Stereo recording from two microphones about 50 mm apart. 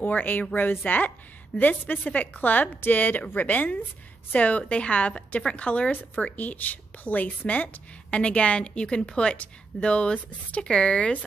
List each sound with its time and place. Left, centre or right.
0.0 s a woman's voice: left